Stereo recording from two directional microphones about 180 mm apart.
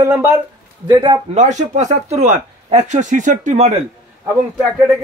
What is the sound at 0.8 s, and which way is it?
Speech, 25° right (ahead or behind).